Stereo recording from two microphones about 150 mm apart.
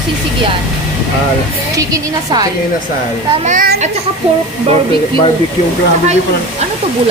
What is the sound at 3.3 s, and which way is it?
Speech, 55° right (ahead or behind).